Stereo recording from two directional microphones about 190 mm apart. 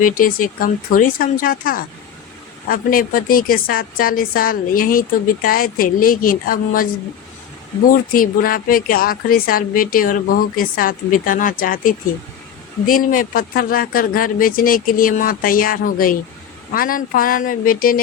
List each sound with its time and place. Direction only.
0.0 s a woman's voice: 45° left (ahead or behind)
8.1 s a woman's voice: 50° left (ahead or behind)